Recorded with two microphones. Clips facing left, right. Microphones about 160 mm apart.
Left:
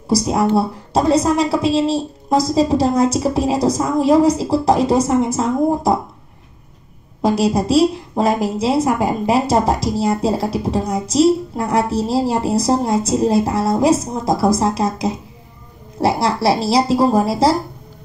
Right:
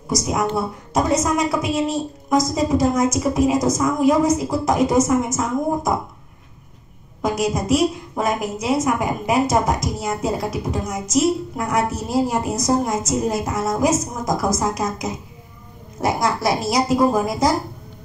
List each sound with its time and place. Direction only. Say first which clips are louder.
0.1 s a woman's voice: left 6 dB; 30° left (ahead or behind)
7.2 s a woman's voice: left 5 dB; 30° left (ahead or behind)